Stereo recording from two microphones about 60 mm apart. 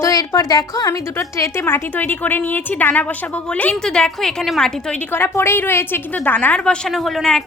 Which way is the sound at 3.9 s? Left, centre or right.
Centre.